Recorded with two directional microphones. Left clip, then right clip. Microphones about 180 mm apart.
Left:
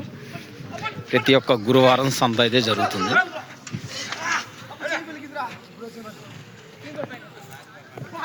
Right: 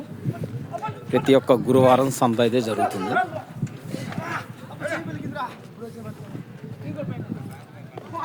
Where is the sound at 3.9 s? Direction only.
55° right (ahead or behind).